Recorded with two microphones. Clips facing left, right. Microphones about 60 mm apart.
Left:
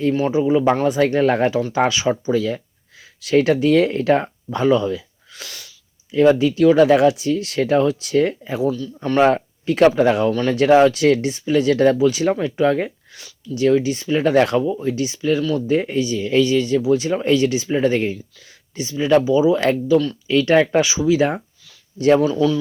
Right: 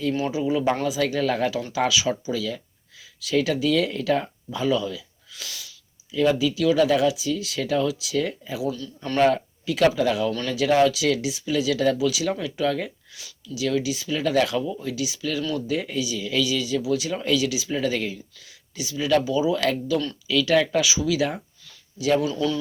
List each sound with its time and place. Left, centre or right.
0.3 s speech: left
0.9 s speech: left
20.2 s speech: left
22.3 s speech: centre